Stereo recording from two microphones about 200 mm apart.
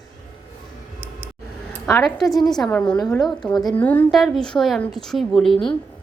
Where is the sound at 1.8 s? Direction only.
Centre (ahead or behind).